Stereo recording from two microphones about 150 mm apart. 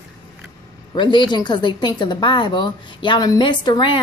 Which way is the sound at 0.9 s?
30° left (ahead or behind).